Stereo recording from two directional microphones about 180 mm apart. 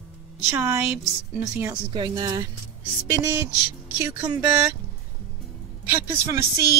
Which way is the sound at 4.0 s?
15° right (ahead or behind).